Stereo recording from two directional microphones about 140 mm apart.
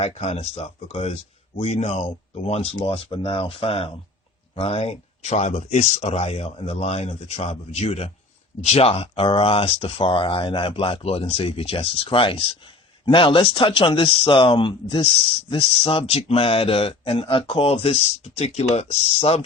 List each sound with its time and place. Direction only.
0.0 s speech: 50° left (ahead or behind)